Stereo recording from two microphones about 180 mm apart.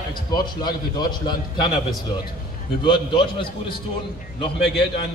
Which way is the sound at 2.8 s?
25° left (ahead or behind).